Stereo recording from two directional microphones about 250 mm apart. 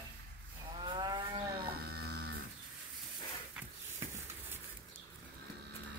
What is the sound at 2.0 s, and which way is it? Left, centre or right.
Livestock, right.